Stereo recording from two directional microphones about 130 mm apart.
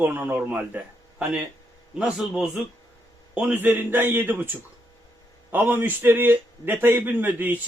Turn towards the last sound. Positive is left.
turn(degrees=-15)  # may be behind; listen again after turning